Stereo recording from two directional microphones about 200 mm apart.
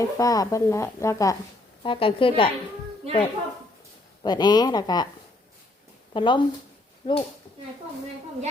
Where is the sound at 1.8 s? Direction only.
25° left (ahead or behind).